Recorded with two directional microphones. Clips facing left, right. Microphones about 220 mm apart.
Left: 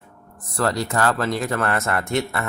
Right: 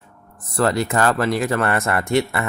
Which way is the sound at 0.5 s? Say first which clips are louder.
Right 3 dB; 10° right (ahead or behind).